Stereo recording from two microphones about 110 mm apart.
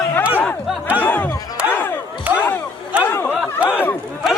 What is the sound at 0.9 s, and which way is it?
Music, 15° left (ahead or behind).